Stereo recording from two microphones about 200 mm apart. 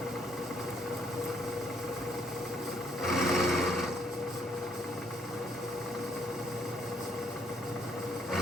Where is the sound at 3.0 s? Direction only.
Centre (ahead or behind).